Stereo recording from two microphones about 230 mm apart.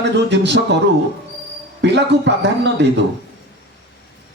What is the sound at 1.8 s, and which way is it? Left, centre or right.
Speech, right.